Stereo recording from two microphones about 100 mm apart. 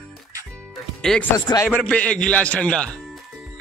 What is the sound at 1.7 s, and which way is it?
A man's voice, 15° left (ahead or behind).